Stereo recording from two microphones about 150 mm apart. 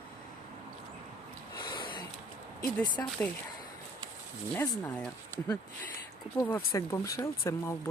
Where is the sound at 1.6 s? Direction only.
30° left (ahead or behind).